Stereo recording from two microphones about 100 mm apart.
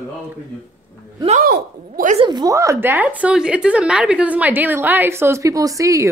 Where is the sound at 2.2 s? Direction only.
45° right (ahead or behind).